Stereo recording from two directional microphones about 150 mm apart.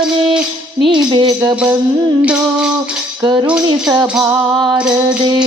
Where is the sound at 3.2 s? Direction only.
30° right (ahead or behind).